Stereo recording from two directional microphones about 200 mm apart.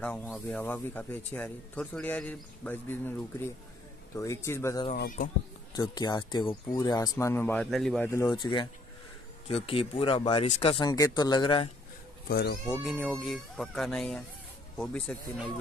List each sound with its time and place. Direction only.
0.0 s speech: 5° left (ahead or behind); by 10.9 s 30° left (ahead or behind)
10.9 s speech: 20° left (ahead or behind)
12.3 s speech: 50° left (ahead or behind)
12.7 s speech: 5° right (ahead or behind)